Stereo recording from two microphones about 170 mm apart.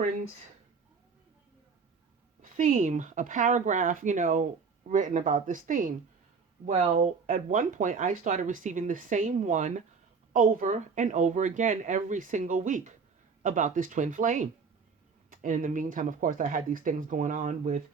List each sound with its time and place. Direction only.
2.4 s speech: 50° right (ahead or behind)